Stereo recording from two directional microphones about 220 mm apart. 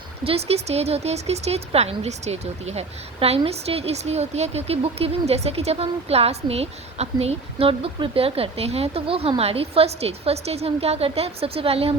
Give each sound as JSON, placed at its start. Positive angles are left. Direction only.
{"t": 0.3, "sound": "speech", "side_deg": -25}